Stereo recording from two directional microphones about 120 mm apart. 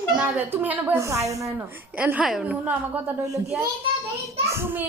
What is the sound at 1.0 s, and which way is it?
Speech, 25° right (ahead or behind).